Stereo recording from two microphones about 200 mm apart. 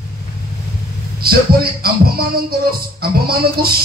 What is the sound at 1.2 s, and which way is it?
Music, 50° right (ahead or behind).